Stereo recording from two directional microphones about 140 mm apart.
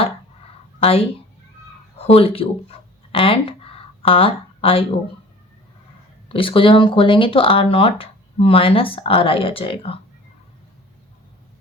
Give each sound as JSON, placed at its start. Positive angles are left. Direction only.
{"t": 0.8, "sound": "speech", "side_deg": 45}
{"t": 6.2, "sound": "speech", "side_deg": 40}